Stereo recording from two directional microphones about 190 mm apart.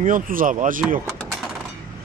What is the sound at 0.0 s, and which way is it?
Speech, 45° right (ahead or behind).